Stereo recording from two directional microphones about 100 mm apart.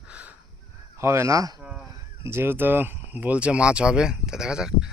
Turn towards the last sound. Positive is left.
turn(degrees=-5)  # may be behind; listen again after turning